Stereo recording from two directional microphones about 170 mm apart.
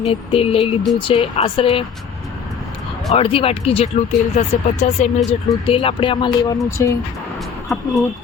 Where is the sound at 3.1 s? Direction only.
35° left (ahead or behind).